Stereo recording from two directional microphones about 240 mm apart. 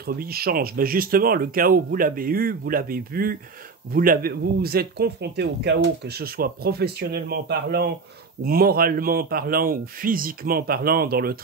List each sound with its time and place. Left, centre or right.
0.0 s speech: right